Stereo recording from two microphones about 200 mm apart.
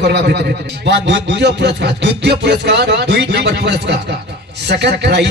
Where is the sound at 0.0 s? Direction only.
60° right (ahead or behind).